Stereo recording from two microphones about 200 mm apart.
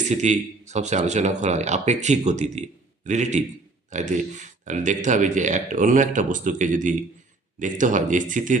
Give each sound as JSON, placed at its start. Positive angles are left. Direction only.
{"t": 0.1, "sound": "speech", "side_deg": -35}